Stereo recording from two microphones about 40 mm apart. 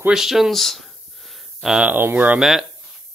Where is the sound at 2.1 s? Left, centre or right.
Right.